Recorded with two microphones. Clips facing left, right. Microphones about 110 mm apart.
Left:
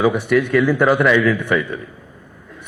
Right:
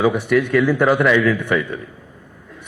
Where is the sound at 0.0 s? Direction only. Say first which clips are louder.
Left 1 dB; 25° left (ahead or behind).